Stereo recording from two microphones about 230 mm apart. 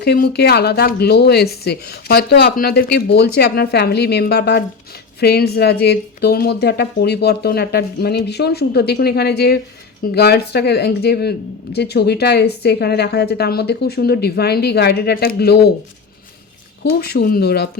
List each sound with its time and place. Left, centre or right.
0.0 s speech: left
17.0 s speech: left